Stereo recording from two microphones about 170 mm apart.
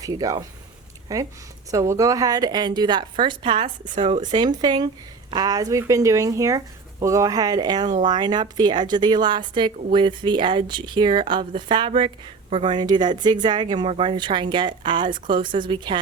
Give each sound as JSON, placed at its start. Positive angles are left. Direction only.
{"t": 0.0, "sound": "a woman's voice", "side_deg": -20}